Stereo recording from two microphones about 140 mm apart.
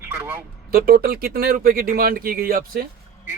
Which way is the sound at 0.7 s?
90° right.